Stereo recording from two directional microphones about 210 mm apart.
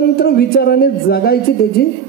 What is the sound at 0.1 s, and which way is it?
A man's voice, 45° left (ahead or behind).